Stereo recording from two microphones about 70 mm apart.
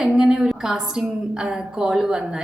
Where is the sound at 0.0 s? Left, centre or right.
Centre.